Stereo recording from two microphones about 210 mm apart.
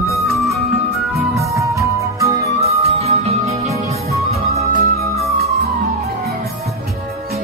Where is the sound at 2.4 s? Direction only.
30° right (ahead or behind).